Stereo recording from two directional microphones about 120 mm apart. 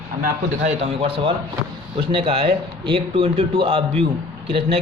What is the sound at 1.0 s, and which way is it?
Speech, 50° right (ahead or behind).